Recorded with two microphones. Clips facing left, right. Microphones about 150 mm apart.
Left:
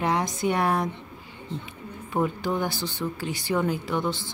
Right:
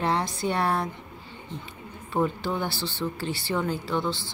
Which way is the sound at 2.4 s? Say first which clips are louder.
Left 2 dB; 15° left (ahead or behind).